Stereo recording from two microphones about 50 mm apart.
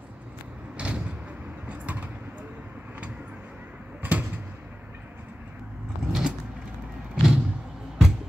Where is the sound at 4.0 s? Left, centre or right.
Right.